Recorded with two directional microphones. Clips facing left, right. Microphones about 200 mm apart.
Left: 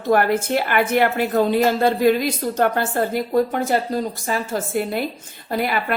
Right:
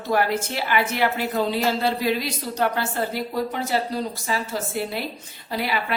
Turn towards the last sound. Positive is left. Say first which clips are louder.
# left 4 dB
turn(degrees=50)  # may be behind; listen again after turning